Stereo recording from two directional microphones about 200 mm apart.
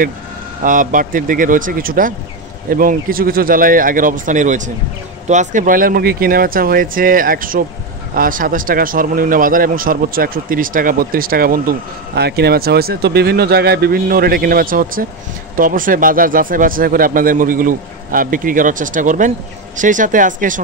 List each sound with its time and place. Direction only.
0.6 s speech: 40° right (ahead or behind)